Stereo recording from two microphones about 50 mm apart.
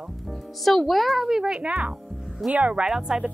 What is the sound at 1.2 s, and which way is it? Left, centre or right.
Speech, centre.